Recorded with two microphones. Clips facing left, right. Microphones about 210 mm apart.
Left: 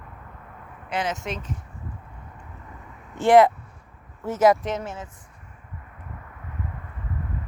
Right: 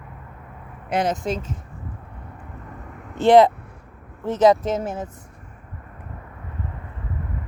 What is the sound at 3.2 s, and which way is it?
Speech, 20° right (ahead or behind).